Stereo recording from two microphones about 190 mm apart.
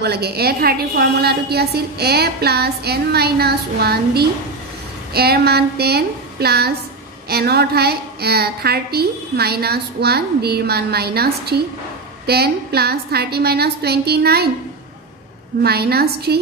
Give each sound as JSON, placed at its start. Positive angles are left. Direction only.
{"t": 0.0, "sound": "a woman's voice", "side_deg": -60}
{"t": 15.6, "sound": "a woman's voice", "side_deg": -55}